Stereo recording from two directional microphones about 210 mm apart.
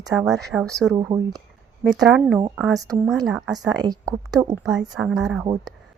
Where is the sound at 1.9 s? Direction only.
Centre (ahead or behind).